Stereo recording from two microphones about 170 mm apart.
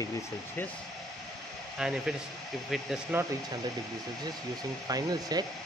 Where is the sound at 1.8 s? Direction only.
5° right (ahead or behind).